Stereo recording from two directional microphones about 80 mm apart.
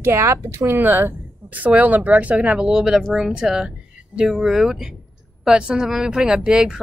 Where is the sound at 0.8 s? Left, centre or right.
Right.